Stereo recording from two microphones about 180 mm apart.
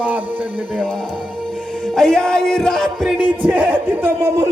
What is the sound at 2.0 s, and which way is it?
Music, 5° left (ahead or behind).